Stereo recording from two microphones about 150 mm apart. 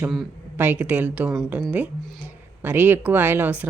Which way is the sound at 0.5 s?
10° right (ahead or behind).